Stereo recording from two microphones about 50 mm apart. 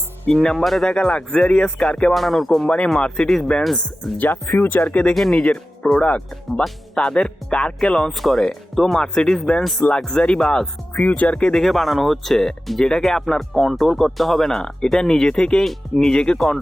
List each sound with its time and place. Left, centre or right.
0.5 s speech: centre
0.9 s speech: centre
2.1 s speech: centre
2.6 s speech: left
3.2 s speech: centre
4.2 s speech: left
5.1 s speech: centre
5.4 s speech: centre
8.1 s speech: centre; by 11.5 s left
11.5 s speech: centre
15.6 s speech: centre
16.1 s speech: centre